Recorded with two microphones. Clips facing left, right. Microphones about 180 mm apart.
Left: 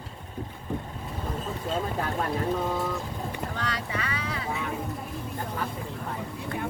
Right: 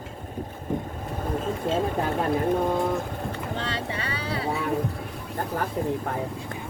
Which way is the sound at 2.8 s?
50° right (ahead or behind).